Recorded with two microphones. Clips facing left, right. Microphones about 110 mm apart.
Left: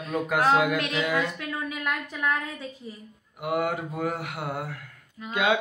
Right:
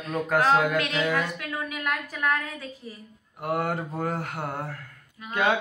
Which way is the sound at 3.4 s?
5° left (ahead or behind).